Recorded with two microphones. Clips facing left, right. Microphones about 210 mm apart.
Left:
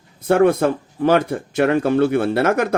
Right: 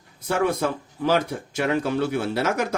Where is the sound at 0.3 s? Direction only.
55° left (ahead or behind).